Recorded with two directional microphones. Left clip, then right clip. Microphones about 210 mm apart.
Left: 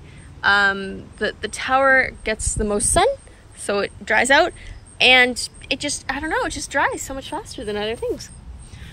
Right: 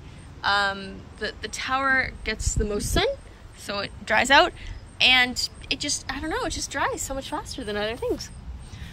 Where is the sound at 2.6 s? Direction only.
15° left (ahead or behind).